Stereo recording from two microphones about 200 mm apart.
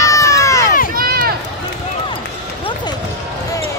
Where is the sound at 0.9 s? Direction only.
50° right (ahead or behind).